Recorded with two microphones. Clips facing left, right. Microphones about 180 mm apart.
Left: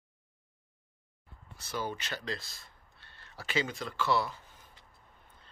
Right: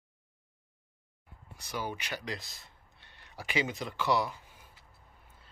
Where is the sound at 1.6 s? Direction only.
15° right (ahead or behind).